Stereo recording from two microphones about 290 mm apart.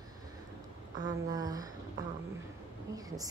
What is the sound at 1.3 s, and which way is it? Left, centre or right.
Speech, centre.